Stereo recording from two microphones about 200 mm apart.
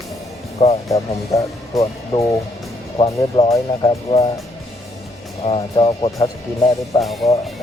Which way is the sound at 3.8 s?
30° left (ahead or behind).